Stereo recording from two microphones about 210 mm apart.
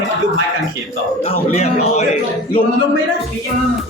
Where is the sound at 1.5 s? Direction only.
30° left (ahead or behind).